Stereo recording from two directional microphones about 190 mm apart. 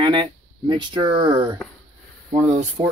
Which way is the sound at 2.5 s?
35° right (ahead or behind).